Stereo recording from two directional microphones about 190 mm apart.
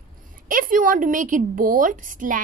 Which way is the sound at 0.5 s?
45° right (ahead or behind).